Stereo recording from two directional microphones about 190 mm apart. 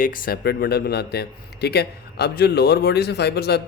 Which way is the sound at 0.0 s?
45° left (ahead or behind).